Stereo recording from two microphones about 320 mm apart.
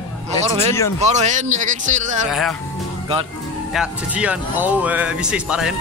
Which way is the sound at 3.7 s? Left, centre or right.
Centre.